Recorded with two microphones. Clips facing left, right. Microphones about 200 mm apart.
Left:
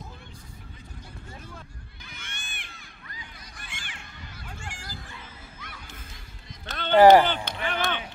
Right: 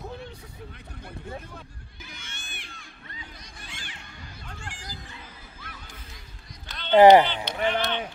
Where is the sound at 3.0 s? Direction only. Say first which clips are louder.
Right 1 dB; 25° right (ahead or behind).